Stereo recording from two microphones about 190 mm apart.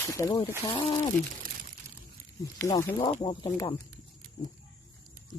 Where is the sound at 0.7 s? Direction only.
30° left (ahead or behind).